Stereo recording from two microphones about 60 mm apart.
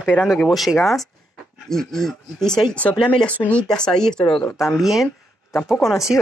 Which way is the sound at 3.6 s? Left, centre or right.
Centre.